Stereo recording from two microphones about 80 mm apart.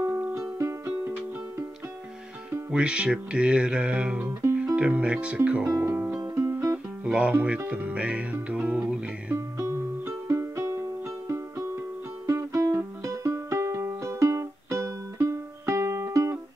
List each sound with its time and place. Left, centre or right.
0.3 s music: right
2.7 s music: centre
4.3 s music: right
4.7 s music: centre
5.7 s music: right
6.1 s music: right
7.1 s speech: centre
7.4 s music: centre
9.3 s music: right